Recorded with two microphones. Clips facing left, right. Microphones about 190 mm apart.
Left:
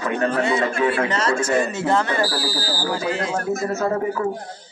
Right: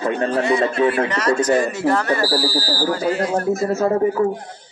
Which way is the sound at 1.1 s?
25° left (ahead or behind).